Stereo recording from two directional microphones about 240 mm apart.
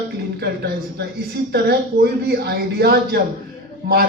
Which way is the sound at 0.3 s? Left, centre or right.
Right.